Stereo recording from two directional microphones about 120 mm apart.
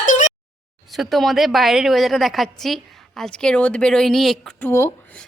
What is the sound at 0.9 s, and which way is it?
A woman's voice, centre (ahead or behind).